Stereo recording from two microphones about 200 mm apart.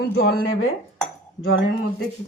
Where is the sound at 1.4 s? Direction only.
80° left.